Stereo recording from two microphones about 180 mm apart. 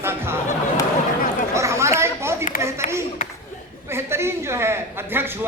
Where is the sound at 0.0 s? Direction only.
15° right (ahead or behind).